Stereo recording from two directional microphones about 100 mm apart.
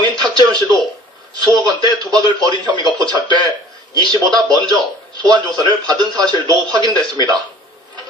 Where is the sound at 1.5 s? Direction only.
45° right (ahead or behind).